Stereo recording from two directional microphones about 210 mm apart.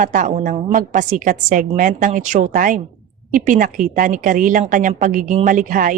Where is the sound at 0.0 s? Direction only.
40° right (ahead or behind).